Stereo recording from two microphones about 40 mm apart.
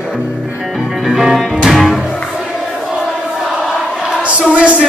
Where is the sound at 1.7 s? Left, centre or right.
Centre.